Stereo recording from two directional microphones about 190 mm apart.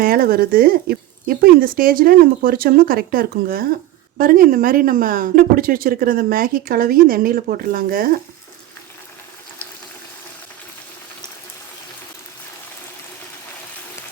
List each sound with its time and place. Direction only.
0.0 s speech: 50° right (ahead or behind)